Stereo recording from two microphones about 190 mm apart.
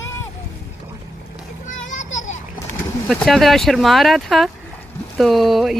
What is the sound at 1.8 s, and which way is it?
Children playing, 40° left (ahead or behind).